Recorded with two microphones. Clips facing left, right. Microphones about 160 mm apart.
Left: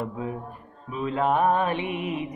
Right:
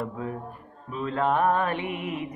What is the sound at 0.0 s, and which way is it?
Mantra, 15° left (ahead or behind).